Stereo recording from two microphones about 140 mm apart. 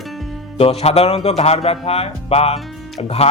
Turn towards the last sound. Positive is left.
turn(degrees=45)  # may be behind; listen again after turning